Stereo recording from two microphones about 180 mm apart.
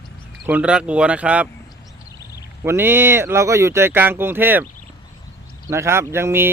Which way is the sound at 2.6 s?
10° right (ahead or behind).